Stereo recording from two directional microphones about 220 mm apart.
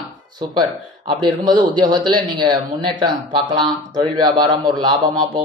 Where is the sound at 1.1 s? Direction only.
20° right (ahead or behind).